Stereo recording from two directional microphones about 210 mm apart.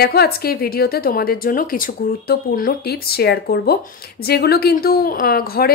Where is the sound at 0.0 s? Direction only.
50° left (ahead or behind).